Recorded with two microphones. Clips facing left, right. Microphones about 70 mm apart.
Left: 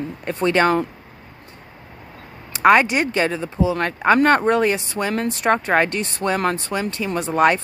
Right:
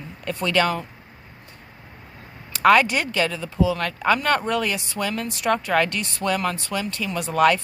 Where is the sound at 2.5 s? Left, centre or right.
Left.